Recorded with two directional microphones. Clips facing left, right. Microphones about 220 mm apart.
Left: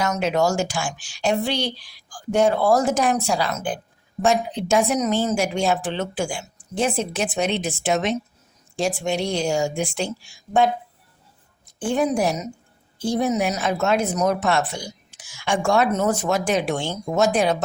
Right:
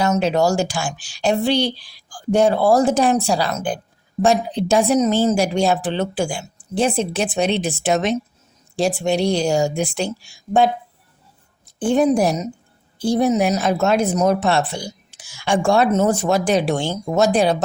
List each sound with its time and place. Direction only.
0.0 s speech: 30° right (ahead or behind)
11.9 s speech: 35° right (ahead or behind)